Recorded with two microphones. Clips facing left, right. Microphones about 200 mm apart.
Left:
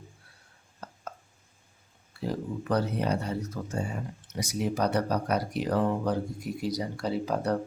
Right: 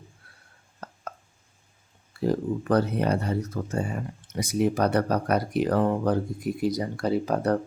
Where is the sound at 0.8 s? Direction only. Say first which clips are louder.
Right 2 dB; 55° right (ahead or behind).